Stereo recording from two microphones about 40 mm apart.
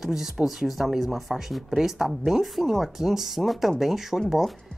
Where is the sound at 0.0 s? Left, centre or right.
Centre.